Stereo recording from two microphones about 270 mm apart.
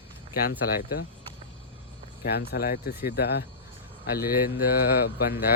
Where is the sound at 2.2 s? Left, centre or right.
Left.